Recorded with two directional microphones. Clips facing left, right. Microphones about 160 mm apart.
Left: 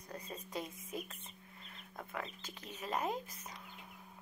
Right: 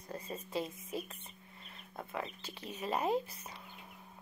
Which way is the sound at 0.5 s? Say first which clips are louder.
Right 4 dB; 25° right (ahead or behind).